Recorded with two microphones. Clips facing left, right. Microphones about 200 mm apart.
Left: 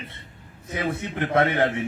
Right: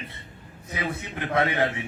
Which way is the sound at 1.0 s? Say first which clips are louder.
Left 3 dB; 55° left (ahead or behind).